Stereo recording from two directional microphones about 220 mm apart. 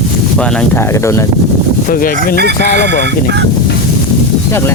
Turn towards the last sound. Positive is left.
turn(degrees=10)  # may be behind; listen again after turning